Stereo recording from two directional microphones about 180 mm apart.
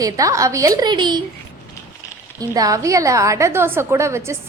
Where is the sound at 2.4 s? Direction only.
20° right (ahead or behind).